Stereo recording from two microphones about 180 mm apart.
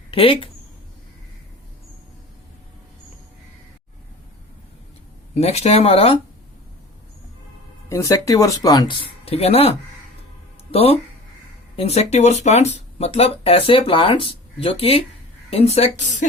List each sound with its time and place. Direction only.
0.1 s speech: 30° left (ahead or behind)
5.3 s speech: 35° left (ahead or behind)
7.9 s speech: 15° left (ahead or behind); by 16.2 s 40° left (ahead or behind)